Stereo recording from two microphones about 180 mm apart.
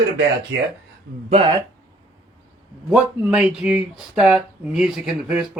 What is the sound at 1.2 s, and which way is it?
Speech, 35° right (ahead or behind).